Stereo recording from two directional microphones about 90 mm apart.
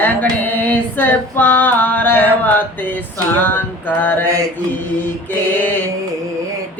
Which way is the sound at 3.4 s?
20° left (ahead or behind).